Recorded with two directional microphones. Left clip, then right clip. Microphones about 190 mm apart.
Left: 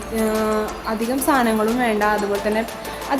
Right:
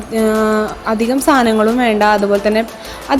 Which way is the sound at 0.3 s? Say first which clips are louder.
Right 6 dB; 25° right (ahead or behind).